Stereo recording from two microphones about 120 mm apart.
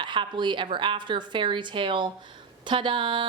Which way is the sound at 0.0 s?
40° right (ahead or behind).